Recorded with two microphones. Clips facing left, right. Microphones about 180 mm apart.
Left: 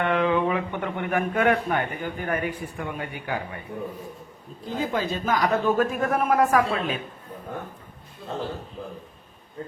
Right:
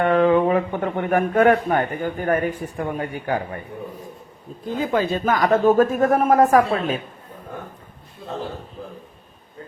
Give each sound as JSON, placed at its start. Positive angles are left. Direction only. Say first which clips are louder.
{"t": 0.0, "sound": "speech", "louder": "right 6 dB", "side_deg": -40}
{"t": 4.8, "sound": "speech", "louder": "right 5 dB", "side_deg": -60}